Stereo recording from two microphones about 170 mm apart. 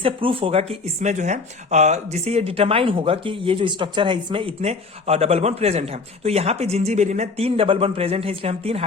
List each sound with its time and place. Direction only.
0.0 s speech: 30° right (ahead or behind)